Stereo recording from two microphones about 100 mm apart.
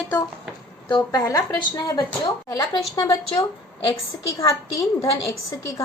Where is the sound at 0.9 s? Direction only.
40° left (ahead or behind).